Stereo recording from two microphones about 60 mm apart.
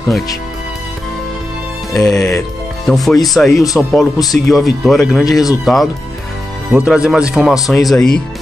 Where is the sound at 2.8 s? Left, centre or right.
Centre.